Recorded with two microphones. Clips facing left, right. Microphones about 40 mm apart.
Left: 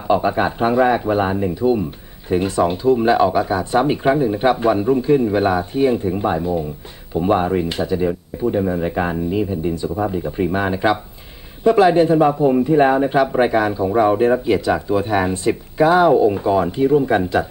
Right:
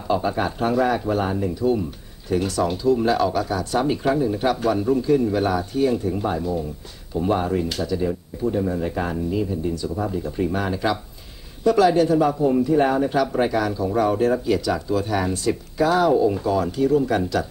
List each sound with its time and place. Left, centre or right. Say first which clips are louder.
0.1 s speech: left 5 dB; left